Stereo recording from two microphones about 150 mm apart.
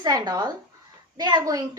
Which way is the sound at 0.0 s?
25° right (ahead or behind).